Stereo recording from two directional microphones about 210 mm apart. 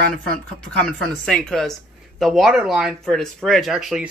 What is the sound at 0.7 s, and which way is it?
Speech, 5° left (ahead or behind).